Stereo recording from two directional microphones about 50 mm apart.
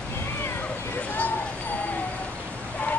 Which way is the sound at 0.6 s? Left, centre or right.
Left.